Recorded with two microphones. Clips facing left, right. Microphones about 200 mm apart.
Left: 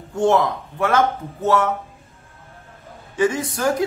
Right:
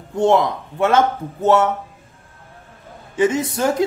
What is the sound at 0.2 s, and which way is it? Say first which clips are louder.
Speech: right 2 dB; 25° right (ahead or behind).